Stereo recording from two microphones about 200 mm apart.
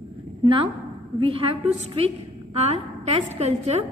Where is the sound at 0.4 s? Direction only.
25° right (ahead or behind).